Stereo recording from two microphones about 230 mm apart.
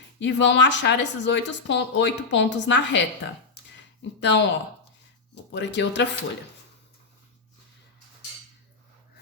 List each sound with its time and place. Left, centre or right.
0.2 s a woman's voice: left
4.2 s a woman's voice: left